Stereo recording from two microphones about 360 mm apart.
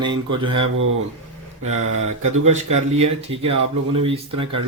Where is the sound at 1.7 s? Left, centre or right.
Right.